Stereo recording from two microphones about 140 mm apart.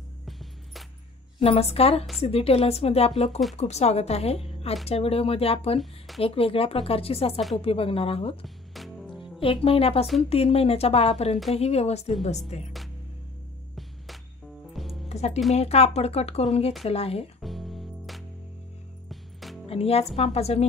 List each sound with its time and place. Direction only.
0.2 s music: centre (ahead or behind)
1.4 s speech: 45° left (ahead or behind)
5.8 s speech: centre (ahead or behind)
6.2 s speech: 45° left (ahead or behind)
8.7 s music: centre (ahead or behind)
9.4 s speech: 40° left (ahead or behind)
14.7 s music: centre (ahead or behind)
15.0 s music: 50° left (ahead or behind)
15.5 s speech: 45° left (ahead or behind)
17.4 s music: centre (ahead or behind)
19.7 s speech: 45° left (ahead or behind)